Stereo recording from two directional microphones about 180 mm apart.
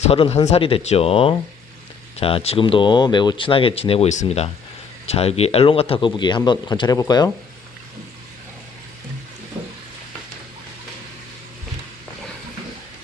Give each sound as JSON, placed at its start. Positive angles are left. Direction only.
{"t": 0.0, "sound": "speech", "side_deg": 35}